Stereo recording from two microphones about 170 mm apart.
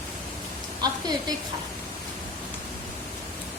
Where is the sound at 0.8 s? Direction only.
25° right (ahead or behind).